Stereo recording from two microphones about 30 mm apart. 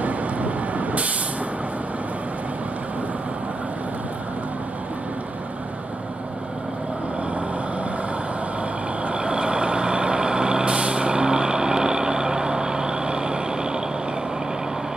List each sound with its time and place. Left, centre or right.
0.0 s vehicle: right
9.0 s vehicle: right